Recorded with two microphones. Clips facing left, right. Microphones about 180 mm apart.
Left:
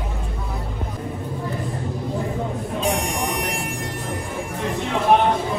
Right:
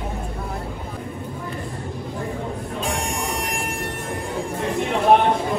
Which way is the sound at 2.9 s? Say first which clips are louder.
Left 3 dB; 35° right (ahead or behind).